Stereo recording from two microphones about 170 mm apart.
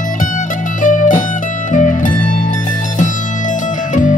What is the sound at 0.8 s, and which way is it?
Music, 50° left (ahead or behind).